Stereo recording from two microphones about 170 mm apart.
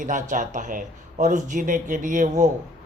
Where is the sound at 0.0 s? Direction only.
50° right (ahead or behind).